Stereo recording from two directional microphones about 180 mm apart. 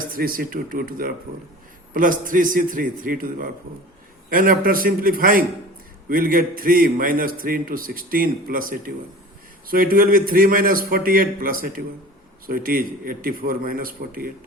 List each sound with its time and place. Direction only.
0.0 s a man's voice: 50° right (ahead or behind)